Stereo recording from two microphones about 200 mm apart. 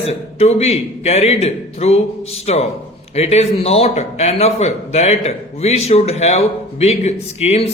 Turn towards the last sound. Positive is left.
turn(degrees=30)  # may be behind; listen again after turning